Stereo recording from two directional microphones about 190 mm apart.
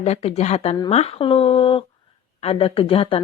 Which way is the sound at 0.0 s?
35° left (ahead or behind).